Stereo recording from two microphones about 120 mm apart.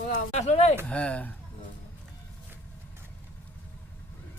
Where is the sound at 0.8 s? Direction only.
10° left (ahead or behind).